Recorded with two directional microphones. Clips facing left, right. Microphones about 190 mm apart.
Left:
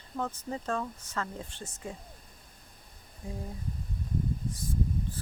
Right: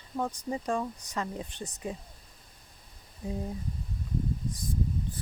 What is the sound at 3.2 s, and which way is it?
Speech, 20° right (ahead or behind).